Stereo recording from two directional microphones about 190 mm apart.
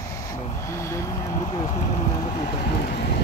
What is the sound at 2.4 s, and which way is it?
Vehicle, 55° left (ahead or behind).